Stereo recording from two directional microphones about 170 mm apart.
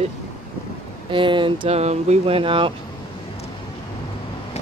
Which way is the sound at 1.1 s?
30° right (ahead or behind).